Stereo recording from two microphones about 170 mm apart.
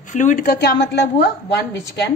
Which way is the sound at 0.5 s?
70° left (ahead or behind).